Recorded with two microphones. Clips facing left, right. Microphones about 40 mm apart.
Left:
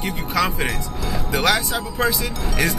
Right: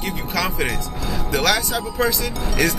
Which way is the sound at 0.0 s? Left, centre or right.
Centre.